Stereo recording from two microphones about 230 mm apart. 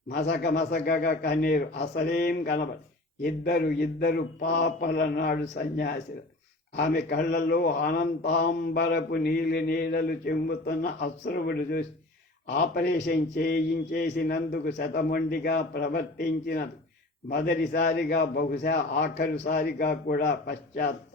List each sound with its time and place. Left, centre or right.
0.3 s a man's voice: left